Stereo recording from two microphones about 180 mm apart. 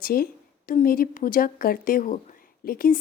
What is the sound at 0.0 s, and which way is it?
Speech, 55° left (ahead or behind).